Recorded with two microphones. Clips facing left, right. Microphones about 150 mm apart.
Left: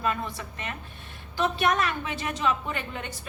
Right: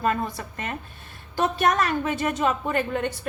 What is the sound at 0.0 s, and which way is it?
A woman's voice, 45° right (ahead or behind).